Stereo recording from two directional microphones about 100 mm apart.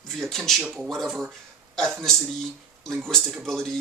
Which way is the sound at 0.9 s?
5° left (ahead or behind).